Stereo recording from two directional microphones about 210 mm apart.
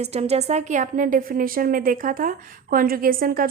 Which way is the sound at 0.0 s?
30° right (ahead or behind).